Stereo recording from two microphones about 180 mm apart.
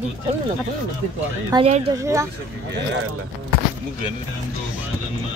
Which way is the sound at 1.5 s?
30° right (ahead or behind).